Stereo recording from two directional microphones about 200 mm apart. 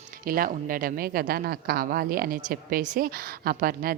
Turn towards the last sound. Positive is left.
turn(degrees=-45)  # may be behind; listen again after turning